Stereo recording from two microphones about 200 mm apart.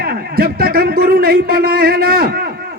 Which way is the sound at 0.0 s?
50° right (ahead or behind).